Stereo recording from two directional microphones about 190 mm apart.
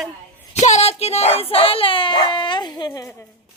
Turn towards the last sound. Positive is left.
turn(degrees=20)  # may be behind; listen again after turning